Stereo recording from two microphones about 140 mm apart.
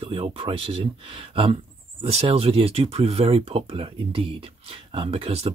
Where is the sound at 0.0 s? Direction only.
40° right (ahead or behind).